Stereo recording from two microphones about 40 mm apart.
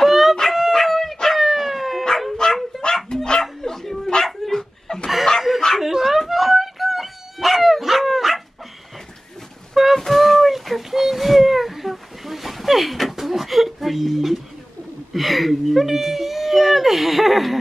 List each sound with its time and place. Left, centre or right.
0.0 s a sound: centre
0.7 s dog: centre
2.3 s dog: centre
3.3 s bow-wow: centre
4.1 s dog: centre
5.8 s dog: centre
9.8 s a sound: centre
15.1 s whimper: centre